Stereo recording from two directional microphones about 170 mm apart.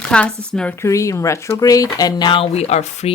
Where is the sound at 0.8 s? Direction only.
20° left (ahead or behind).